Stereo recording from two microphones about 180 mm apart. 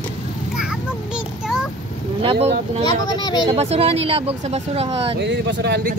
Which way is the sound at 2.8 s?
25° left (ahead or behind).